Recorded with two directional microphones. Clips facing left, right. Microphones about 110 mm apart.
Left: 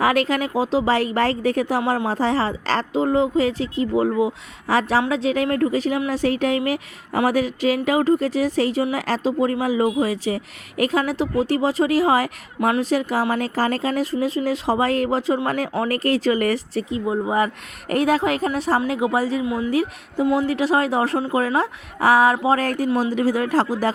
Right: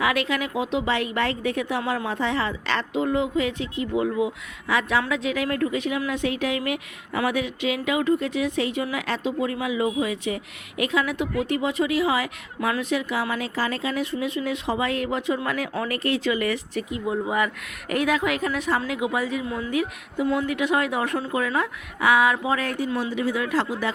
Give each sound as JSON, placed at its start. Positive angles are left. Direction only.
{"t": 0.0, "sound": "speech", "side_deg": 40}